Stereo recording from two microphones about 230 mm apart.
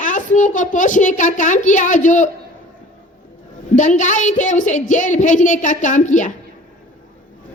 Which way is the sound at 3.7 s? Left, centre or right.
Left.